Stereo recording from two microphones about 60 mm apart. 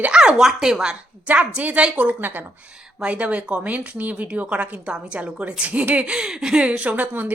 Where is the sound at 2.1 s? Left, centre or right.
Right.